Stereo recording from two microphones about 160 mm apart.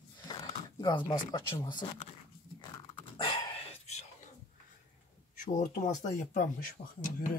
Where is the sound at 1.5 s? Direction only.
30° left (ahead or behind).